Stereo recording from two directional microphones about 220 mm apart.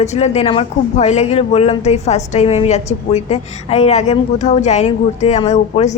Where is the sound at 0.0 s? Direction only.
30° left (ahead or behind).